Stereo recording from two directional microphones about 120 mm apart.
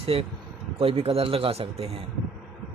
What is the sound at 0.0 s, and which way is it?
A man's voice, 55° right (ahead or behind).